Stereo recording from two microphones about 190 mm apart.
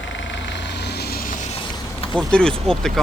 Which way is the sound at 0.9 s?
55° left (ahead or behind).